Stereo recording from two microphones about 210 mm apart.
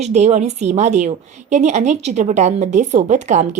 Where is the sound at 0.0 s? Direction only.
30° right (ahead or behind).